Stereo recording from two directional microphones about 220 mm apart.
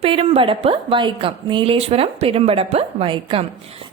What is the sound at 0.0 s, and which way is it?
A woman's voice, 25° right (ahead or behind).